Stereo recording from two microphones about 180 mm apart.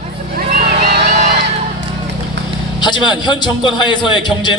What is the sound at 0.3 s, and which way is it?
Vehicle, 45° right (ahead or behind).